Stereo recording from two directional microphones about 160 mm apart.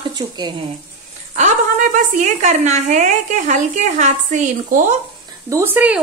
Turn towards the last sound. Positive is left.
turn(degrees=-10)  # may be behind; listen again after turning